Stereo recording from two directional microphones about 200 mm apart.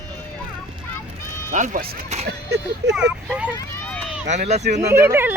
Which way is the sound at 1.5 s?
40° right (ahead or behind).